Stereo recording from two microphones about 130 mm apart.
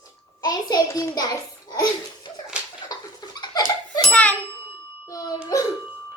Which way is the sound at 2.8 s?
30° left (ahead or behind).